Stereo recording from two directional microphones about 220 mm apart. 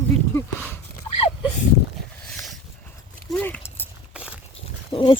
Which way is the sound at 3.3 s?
10° left (ahead or behind).